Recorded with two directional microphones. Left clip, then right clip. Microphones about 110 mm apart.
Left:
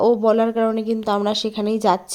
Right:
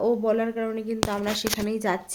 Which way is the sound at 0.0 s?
55° left (ahead or behind).